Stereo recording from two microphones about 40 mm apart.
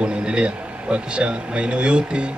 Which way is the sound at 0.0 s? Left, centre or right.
Right.